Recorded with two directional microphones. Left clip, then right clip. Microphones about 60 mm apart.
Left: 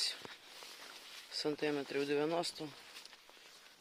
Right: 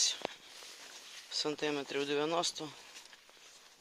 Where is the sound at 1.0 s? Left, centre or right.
Left.